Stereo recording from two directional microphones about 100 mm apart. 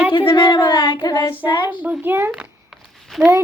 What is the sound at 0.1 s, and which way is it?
Speech, 55° left (ahead or behind).